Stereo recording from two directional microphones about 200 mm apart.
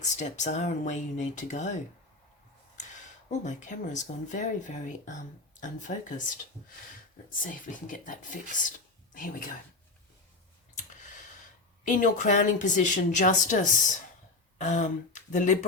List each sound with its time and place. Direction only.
0.0 s speech: 35° left (ahead or behind)
7.4 s speech: 40° left (ahead or behind)
11.9 s speech: 40° left (ahead or behind)